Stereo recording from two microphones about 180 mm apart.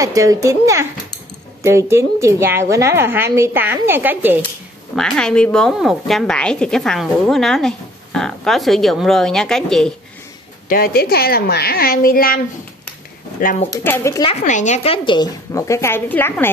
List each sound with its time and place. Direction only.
0.0 s a woman's voice: 20° right (ahead or behind)
4.9 s a woman's voice: 5° left (ahead or behind)
10.7 s a child's voice: 55° left (ahead or behind)
13.8 s speech: 15° left (ahead or behind)
14.2 s a woman's voice: 40° left (ahead or behind); by 16.4 s 10° left (ahead or behind)